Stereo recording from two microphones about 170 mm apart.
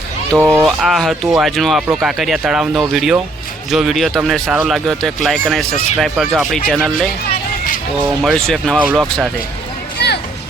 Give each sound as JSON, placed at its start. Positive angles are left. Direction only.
{"t": 0.3, "sound": "speech", "side_deg": -15}
{"t": 0.8, "sound": "speech", "side_deg": 0}
{"t": 10.0, "sound": "music", "side_deg": 75}